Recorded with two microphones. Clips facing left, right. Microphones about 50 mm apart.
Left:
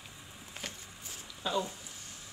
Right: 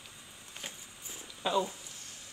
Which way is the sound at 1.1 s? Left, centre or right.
Centre.